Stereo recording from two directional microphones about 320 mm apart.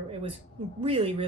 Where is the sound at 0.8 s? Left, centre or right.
Centre.